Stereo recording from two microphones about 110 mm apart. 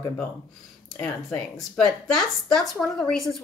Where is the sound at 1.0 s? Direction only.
5° left (ahead or behind).